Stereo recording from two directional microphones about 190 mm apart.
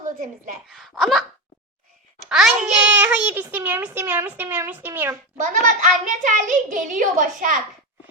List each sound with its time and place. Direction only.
0.0 s a woman's voice: 45° right (ahead or behind)
0.7 s a child's voice: centre (ahead or behind)
2.3 s a child's voice: 5° right (ahead or behind)
5.4 s a child's voice: 40° right (ahead or behind)